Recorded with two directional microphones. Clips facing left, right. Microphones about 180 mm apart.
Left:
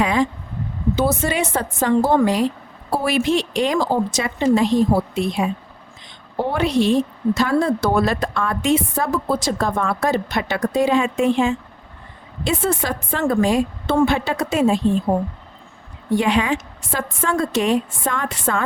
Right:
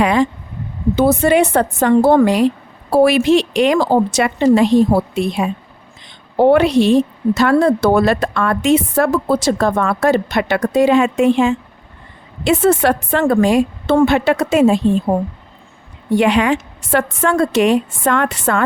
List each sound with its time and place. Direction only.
0.0 s speech: 70° right (ahead or behind)
0.9 s a woman's voice: 60° right (ahead or behind)
16.1 s a woman's voice: 70° right (ahead or behind)